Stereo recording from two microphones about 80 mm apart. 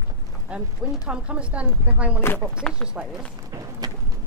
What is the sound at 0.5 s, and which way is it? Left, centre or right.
A woman's voice, centre.